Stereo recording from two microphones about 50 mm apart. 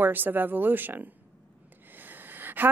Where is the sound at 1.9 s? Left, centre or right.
Right.